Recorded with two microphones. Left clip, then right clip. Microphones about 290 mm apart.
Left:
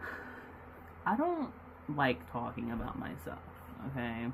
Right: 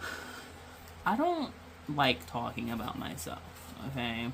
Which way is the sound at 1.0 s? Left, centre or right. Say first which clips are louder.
Right 3 dB; right.